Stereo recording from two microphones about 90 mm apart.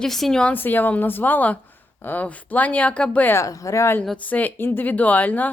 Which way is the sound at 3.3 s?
35° left (ahead or behind).